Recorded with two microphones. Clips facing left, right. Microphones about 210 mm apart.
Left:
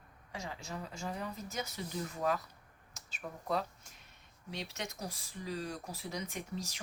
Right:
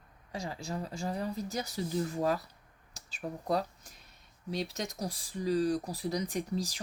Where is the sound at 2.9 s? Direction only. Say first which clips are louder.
Right 6 dB; 35° right (ahead or behind).